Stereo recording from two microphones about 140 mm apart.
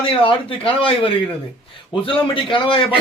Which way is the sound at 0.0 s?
40° left (ahead or behind).